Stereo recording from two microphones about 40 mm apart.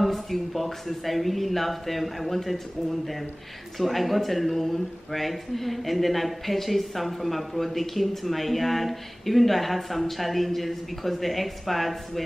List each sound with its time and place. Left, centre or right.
0.0 s speech: centre